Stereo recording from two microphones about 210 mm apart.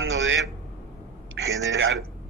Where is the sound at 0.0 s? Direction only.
65° right (ahead or behind).